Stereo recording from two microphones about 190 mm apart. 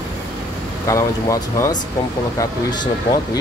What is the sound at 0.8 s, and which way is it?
Speech, 15° left (ahead or behind).